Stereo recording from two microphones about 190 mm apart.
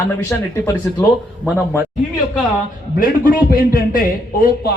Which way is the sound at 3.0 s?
45° left (ahead or behind).